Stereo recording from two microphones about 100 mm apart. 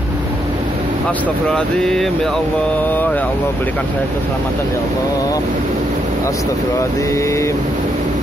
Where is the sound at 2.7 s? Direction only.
15° left (ahead or behind).